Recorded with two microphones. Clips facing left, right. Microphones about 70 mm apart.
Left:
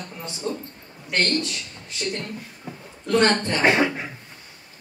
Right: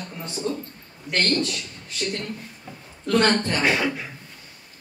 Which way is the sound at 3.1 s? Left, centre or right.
Left.